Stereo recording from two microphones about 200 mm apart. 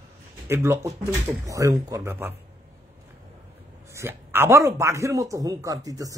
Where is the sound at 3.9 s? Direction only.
10° right (ahead or behind).